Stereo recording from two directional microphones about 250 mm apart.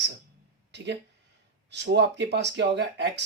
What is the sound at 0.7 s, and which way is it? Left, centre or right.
Speech, right.